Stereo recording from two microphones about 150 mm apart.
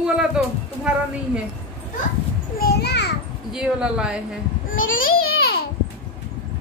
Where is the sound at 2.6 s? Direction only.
90° left.